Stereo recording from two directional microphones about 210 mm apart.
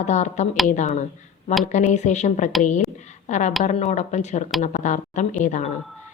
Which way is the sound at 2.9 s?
35° left (ahead or behind).